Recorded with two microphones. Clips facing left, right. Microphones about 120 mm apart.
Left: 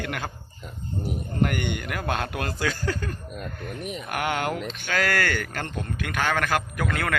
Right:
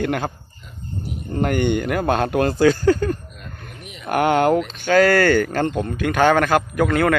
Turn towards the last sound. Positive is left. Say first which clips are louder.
# right 9 dB
turn(degrees=-30)  # may be behind; listen again after turning